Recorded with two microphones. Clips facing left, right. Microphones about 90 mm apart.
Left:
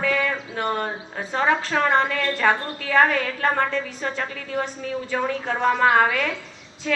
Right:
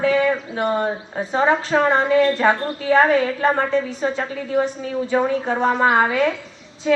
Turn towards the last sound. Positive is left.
turn(degrees=-15)  # may be behind; listen again after turning